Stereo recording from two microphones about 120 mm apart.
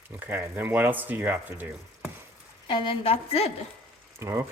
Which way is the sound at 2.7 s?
45° left (ahead or behind).